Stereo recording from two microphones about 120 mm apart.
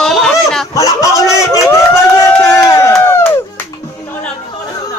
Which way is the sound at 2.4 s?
25° left (ahead or behind).